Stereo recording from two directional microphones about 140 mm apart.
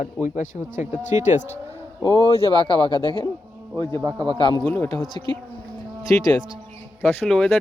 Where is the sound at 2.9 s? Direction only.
30° right (ahead or behind).